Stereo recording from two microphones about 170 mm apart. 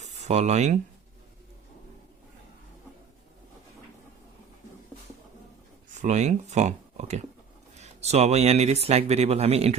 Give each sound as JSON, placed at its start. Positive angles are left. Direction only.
{"t": 0.0, "sound": "speech", "side_deg": -40}
{"t": 5.9, "sound": "speech", "side_deg": -45}